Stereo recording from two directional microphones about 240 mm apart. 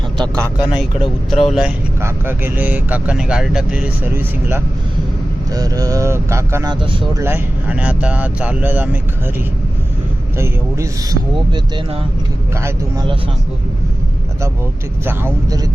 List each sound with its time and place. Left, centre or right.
0.2 s speech: centre
1.3 s speech: centre
10.3 s speech: centre
12.6 s speech: centre
15.0 s speech: centre